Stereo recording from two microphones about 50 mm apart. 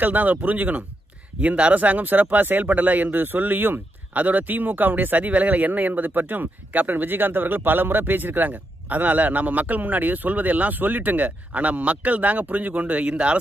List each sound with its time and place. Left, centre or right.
0.0 s speech: right